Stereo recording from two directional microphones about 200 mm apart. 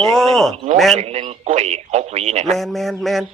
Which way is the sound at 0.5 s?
30° right (ahead or behind).